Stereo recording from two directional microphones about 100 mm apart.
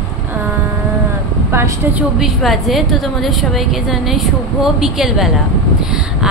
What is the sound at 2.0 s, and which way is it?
A woman's voice, 5° right (ahead or behind).